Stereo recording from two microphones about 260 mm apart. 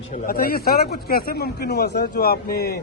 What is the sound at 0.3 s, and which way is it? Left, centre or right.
Speech, left.